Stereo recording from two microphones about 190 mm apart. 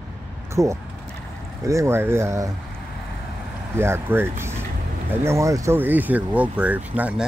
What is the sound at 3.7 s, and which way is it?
Speech, 15° right (ahead or behind).